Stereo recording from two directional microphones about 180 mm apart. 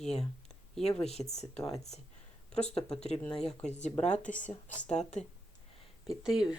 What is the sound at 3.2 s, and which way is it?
Speech, 5° left (ahead or behind).